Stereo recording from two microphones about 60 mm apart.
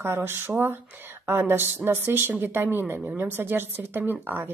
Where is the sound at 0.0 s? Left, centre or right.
Right.